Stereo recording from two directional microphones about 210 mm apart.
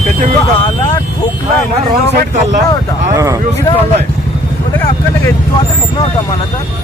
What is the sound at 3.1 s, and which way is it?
Speech, 15° right (ahead or behind).